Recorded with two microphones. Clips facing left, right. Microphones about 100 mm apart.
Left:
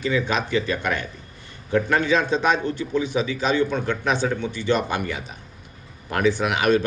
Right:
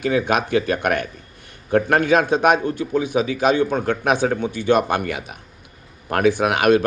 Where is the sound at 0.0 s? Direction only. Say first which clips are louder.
Right 4 dB; 55° right (ahead or behind).